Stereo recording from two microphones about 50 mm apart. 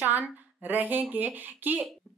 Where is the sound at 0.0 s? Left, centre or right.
Right.